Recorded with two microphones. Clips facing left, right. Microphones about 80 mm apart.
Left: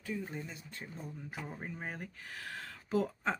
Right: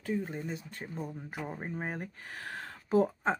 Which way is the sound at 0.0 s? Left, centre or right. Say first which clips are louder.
Right 6 dB; right.